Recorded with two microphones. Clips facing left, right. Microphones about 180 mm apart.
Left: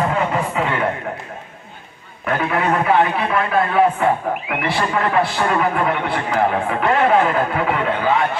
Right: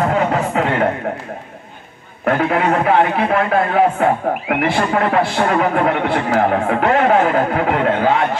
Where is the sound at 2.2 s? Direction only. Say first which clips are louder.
Right 4 dB; 60° right (ahead or behind).